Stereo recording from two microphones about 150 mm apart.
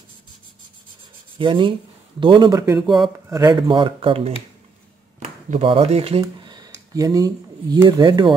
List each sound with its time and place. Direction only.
1.4 s speech: 35° right (ahead or behind)
6.4 s speech: 25° right (ahead or behind)